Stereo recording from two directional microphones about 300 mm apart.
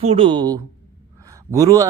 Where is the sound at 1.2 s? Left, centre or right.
Centre.